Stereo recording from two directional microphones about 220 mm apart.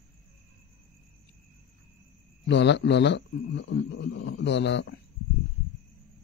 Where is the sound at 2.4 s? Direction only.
55° left (ahead or behind).